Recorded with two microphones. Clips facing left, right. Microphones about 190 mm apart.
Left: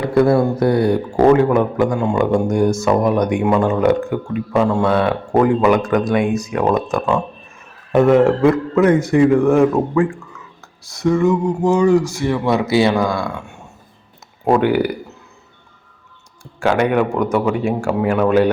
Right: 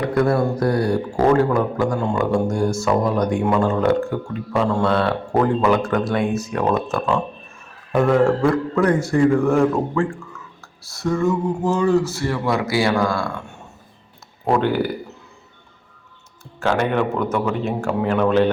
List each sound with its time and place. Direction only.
0.0 s a man's voice: 25° left (ahead or behind)
14.4 s speech: 15° left (ahead or behind)
16.6 s speech: 15° left (ahead or behind)